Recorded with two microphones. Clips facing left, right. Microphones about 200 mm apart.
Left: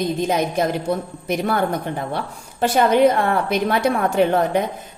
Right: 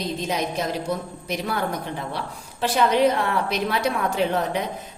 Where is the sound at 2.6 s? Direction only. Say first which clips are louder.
Left 4 dB; 50° left (ahead or behind).